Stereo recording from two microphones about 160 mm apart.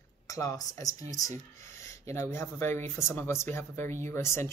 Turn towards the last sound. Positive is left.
turn(degrees=15)  # may be behind; listen again after turning